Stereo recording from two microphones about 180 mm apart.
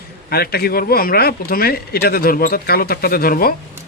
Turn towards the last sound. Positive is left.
turn(degrees=55)  # may be behind; listen again after turning